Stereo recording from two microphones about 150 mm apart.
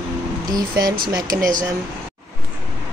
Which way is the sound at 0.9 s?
75° right (ahead or behind).